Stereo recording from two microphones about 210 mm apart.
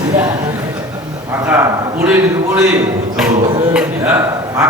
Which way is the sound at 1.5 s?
5° right (ahead or behind).